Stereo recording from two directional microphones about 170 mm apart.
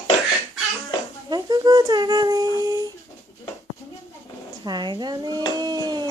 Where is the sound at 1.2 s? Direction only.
25° right (ahead or behind).